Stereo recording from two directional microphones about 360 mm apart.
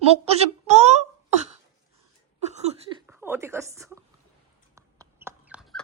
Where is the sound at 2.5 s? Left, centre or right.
Centre.